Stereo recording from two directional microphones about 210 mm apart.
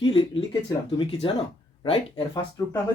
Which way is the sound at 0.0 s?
25° left (ahead or behind).